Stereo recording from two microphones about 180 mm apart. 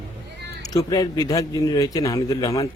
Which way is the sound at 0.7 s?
20° left (ahead or behind).